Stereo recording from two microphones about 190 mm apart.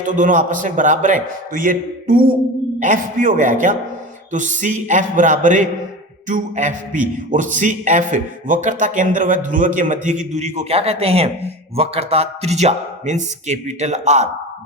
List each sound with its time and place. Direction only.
0.0 s a man's voice: 40° right (ahead or behind)